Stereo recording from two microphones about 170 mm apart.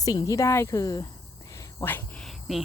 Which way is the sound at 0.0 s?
20° left (ahead or behind).